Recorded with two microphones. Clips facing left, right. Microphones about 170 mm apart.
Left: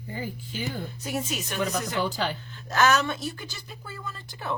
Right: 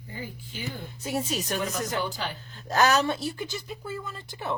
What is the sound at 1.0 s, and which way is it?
A woman's voice, 25° right (ahead or behind).